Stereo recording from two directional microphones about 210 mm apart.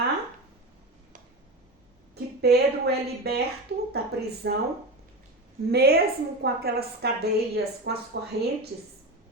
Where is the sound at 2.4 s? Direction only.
50° right (ahead or behind).